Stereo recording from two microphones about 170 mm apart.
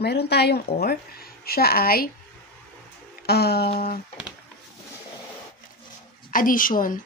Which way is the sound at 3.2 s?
70° left (ahead or behind).